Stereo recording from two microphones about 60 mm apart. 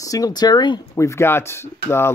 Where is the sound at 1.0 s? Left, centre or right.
Left.